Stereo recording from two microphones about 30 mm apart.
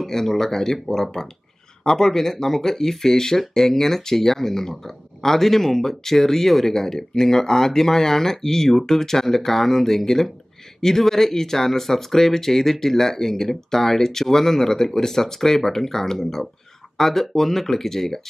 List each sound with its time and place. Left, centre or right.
0.0 s speech: centre